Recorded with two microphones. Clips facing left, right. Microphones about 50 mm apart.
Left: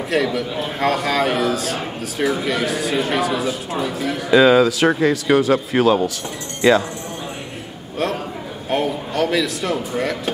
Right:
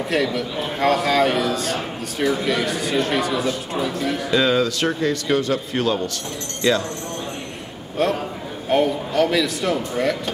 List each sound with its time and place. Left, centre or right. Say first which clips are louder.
0.1 s a man's voice: left 3 dB; centre
8.0 s a man's voice: right 2 dB; centre